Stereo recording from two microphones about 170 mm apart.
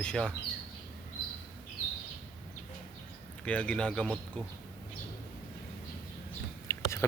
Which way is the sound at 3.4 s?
5° left (ahead or behind).